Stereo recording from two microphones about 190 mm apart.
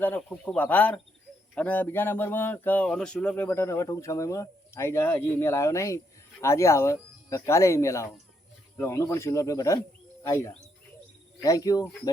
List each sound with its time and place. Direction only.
0.0 s speech: 10° left (ahead or behind)